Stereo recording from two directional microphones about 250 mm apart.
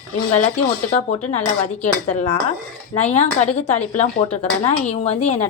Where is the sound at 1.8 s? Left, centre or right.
Left.